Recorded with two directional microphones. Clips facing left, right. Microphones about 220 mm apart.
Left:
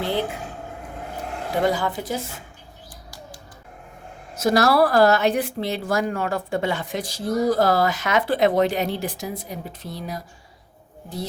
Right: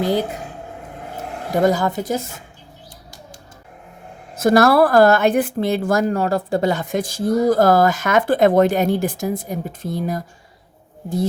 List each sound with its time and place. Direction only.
0.0 s speech: 40° right (ahead or behind)
1.6 s speech: 40° right (ahead or behind)
4.4 s speech: 55° right (ahead or behind)